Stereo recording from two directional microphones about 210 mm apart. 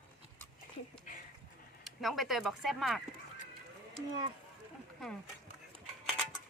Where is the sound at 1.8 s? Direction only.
Centre (ahead or behind).